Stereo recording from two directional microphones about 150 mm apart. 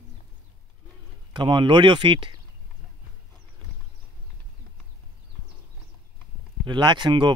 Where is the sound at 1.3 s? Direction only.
30° right (ahead or behind).